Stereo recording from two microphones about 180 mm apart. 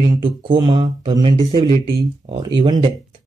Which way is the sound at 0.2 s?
25° right (ahead or behind).